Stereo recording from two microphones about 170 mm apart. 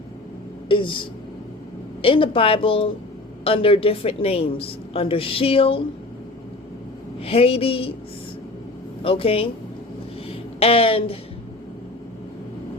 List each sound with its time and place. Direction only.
0.7 s a woman's voice: 30° left (ahead or behind)
7.3 s a woman's voice: 35° left (ahead or behind)
9.0 s a woman's voice: 35° left (ahead or behind)
10.2 s a sound: 35° left (ahead or behind)